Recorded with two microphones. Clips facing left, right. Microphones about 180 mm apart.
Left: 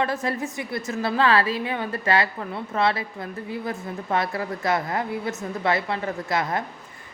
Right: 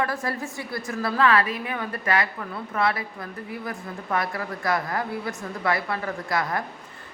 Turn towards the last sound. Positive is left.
turn(degrees=25)  # may be behind; listen again after turning